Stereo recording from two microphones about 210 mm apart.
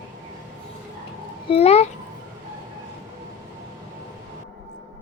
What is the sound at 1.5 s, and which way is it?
Speech, 30° left (ahead or behind).